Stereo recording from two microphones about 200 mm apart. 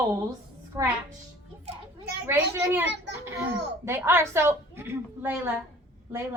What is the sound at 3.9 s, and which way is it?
A woman's voice, 10° right (ahead or behind).